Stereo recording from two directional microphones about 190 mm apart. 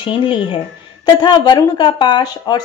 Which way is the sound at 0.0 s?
25° left (ahead or behind).